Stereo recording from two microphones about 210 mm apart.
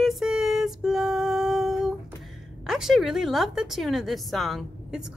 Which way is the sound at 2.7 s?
Centre (ahead or behind).